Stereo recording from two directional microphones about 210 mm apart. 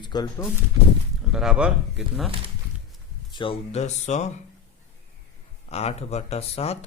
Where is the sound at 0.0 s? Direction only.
20° left (ahead or behind).